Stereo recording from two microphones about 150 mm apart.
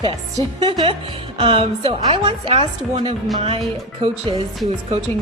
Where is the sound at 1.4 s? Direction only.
40° right (ahead or behind).